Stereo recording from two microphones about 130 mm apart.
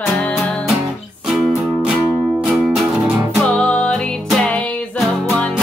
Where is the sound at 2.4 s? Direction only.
5° right (ahead or behind).